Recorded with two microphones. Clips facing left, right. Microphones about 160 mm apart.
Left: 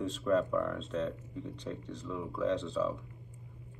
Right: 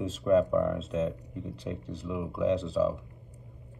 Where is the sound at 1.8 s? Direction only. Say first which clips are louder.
Right 3 dB; 30° right (ahead or behind).